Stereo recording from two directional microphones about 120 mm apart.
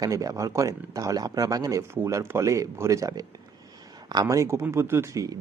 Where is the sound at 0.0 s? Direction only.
30° right (ahead or behind).